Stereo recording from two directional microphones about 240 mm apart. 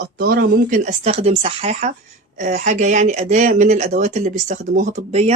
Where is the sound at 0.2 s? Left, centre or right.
Right.